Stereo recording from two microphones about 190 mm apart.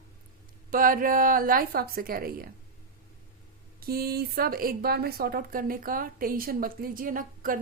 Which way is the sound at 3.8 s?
55° right (ahead or behind).